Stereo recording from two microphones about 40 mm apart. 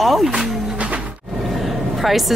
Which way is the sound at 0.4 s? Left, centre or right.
Centre.